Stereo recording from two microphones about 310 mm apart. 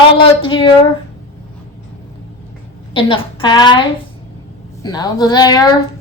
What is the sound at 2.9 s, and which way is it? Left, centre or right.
A woman's voice, centre.